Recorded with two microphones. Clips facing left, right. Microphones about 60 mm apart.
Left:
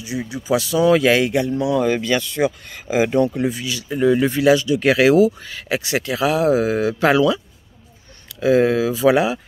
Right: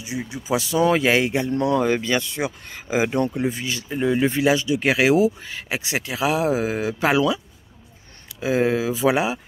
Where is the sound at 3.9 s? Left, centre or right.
Centre.